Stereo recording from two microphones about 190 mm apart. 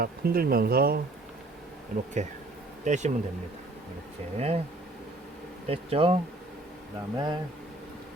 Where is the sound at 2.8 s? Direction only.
40° right (ahead or behind).